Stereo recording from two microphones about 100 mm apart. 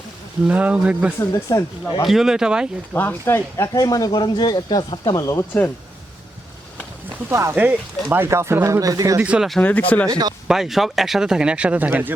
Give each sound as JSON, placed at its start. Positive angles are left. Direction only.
{"t": 0.4, "sound": "speech", "side_deg": -15}
{"t": 1.2, "sound": "speech", "side_deg": 30}
{"t": 2.0, "sound": "speech", "side_deg": -5}
{"t": 2.9, "sound": "speech", "side_deg": 20}
{"t": 5.1, "sound": "speech", "side_deg": 35}
{"t": 7.3, "sound": "speech", "side_deg": -30}
{"t": 7.5, "sound": "speech", "side_deg": -20}
{"t": 9.2, "sound": "speech", "side_deg": -10}
{"t": 9.6, "sound": "speech", "side_deg": 15}
{"t": 10.1, "sound": "speech", "side_deg": -40}
{"t": 10.5, "sound": "speech", "side_deg": -5}